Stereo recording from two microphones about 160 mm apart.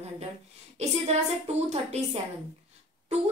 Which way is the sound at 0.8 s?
40° right (ahead or behind).